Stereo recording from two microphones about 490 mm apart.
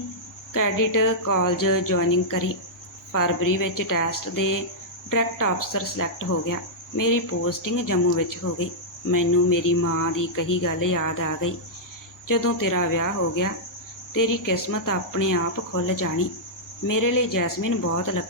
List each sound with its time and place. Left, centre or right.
0.5 s cricket: left